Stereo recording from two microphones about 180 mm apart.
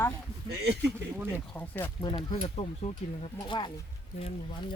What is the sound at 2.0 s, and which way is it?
Speech, 25° left (ahead or behind).